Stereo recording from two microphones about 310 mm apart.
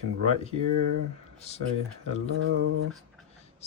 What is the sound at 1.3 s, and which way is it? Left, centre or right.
Speech, left.